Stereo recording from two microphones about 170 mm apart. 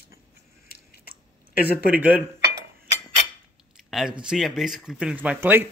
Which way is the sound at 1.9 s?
10° right (ahead or behind).